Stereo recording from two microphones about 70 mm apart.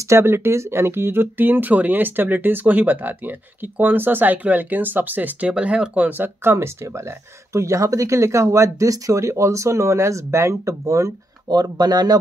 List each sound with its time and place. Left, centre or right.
0.1 s speech: right
7.5 s speech: right
11.4 s speech: right